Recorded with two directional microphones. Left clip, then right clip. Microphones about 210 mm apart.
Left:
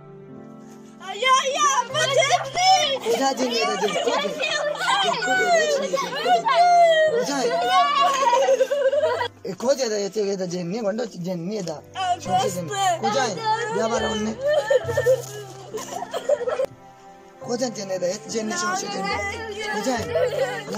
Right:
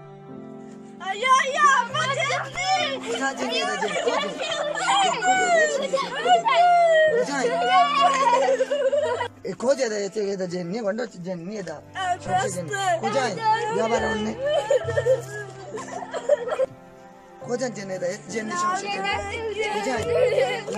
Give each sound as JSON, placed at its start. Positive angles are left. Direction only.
{"t": 1.1, "sound": "speech", "side_deg": 5}
{"t": 2.5, "sound": "a child's voice", "side_deg": 30}
{"t": 3.3, "sound": "speech", "side_deg": 5}
{"t": 12.7, "sound": "speech", "side_deg": -5}
{"t": 15.7, "sound": "music", "side_deg": 0}
{"t": 17.5, "sound": "speech", "side_deg": 0}
{"t": 18.9, "sound": "speech", "side_deg": -10}
{"t": 20.1, "sound": "speech", "side_deg": -20}